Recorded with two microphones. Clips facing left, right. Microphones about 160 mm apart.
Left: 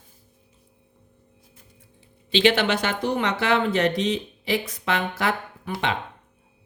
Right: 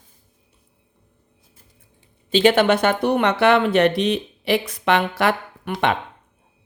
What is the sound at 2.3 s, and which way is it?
Speech, 45° right (ahead or behind).